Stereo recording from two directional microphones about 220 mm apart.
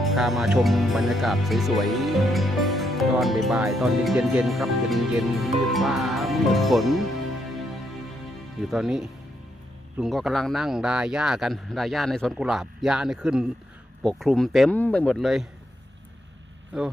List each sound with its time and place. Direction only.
0.0 s speech: centre (ahead or behind)
8.5 s speech: centre (ahead or behind)
16.7 s speech: centre (ahead or behind)